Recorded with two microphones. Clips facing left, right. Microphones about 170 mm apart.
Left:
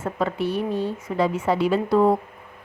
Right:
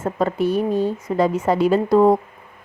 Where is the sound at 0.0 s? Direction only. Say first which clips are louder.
Right 4 dB; 45° right (ahead or behind).